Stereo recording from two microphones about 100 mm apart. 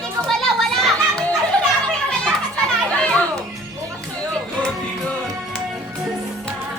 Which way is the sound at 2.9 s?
10° left (ahead or behind).